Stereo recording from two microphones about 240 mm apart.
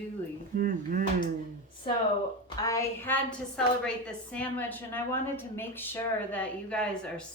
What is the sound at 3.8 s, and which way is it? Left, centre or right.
A woman's voice, centre.